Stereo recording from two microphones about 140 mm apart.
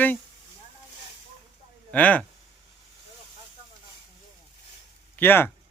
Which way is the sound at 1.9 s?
10° left (ahead or behind).